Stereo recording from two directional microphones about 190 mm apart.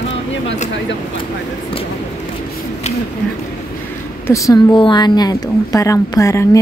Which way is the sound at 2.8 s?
35° left (ahead or behind).